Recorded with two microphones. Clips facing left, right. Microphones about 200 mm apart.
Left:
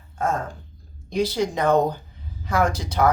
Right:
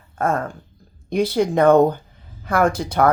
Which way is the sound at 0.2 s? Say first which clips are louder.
Right 3 dB; 55° right (ahead or behind).